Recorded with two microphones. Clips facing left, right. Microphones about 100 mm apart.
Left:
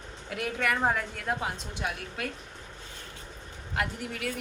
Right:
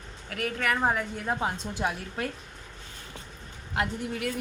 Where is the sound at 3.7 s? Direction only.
25° right (ahead or behind).